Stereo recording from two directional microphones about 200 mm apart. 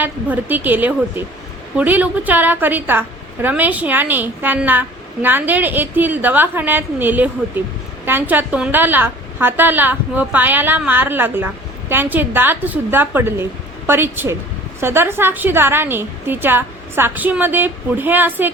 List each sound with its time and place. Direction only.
0.0 s a woman's voice: 10° right (ahead or behind)